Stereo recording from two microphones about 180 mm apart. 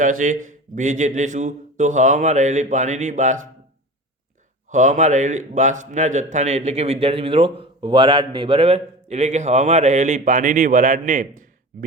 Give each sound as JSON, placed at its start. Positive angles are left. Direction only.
{"t": 0.0, "sound": "speech", "side_deg": -45}
{"t": 4.7, "sound": "a man's voice", "side_deg": -45}